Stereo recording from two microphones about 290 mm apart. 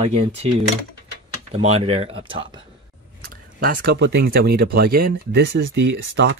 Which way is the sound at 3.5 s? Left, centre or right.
Right.